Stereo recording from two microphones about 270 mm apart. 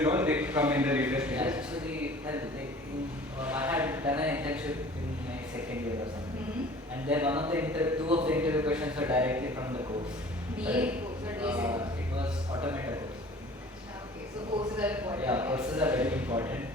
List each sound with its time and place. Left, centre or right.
0.0 s a man's voice: centre
3.4 s speech: centre
7.1 s a man's voice: centre
8.0 s speech: right
8.3 s a man's voice: centre
12.1 s a man's voice: centre
12.6 s speech: centre
14.8 s a man's voice: centre